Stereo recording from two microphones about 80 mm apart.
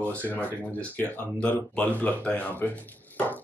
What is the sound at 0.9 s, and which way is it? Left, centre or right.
Speech, centre.